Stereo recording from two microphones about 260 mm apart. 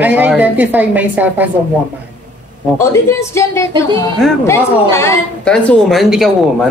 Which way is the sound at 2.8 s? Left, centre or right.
Centre.